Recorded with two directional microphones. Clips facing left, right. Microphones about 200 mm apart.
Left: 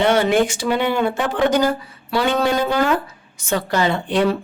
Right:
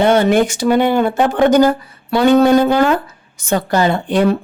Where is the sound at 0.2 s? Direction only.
40° right (ahead or behind).